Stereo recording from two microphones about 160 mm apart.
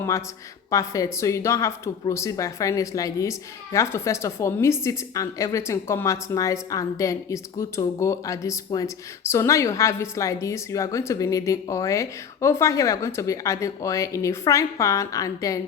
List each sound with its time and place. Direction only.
0.7 s speech: 20° left (ahead or behind)